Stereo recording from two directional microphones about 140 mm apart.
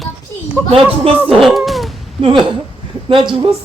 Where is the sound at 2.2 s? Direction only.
35° right (ahead or behind).